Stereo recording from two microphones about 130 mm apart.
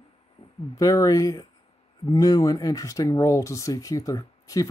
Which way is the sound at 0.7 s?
25° left (ahead or behind).